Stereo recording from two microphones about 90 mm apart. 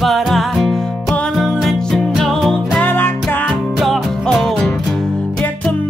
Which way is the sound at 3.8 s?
Centre (ahead or behind).